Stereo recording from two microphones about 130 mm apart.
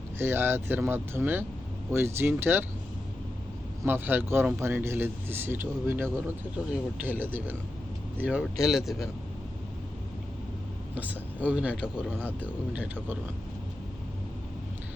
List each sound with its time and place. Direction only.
0.2 s speech: 15° right (ahead or behind)
3.8 s speech: 15° right (ahead or behind)
10.9 s speech: 10° right (ahead or behind)